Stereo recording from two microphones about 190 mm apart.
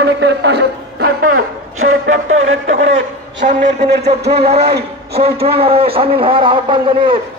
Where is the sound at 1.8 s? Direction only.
90° right; by 4.0 s 65° right (ahead or behind).